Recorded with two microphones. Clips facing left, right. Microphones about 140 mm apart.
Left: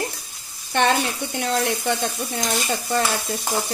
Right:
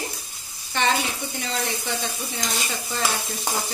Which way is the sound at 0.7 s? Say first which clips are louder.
Left 4 dB; 55° left (ahead or behind).